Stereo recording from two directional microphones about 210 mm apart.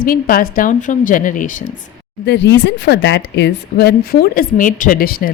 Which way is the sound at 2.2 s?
55° left (ahead or behind).